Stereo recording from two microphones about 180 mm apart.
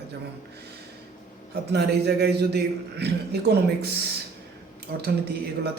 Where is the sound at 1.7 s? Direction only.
65° right (ahead or behind).